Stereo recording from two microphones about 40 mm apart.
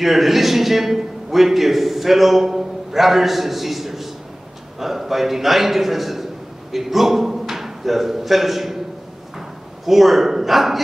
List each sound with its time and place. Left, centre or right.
0.0 s a man's voice: centre
9.8 s a man's voice: centre